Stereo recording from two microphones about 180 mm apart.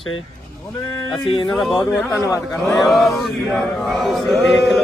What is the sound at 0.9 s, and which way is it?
Speech, 25° left (ahead or behind).